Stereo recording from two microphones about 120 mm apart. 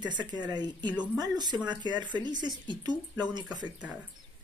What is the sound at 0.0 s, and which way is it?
Speech, 35° right (ahead or behind).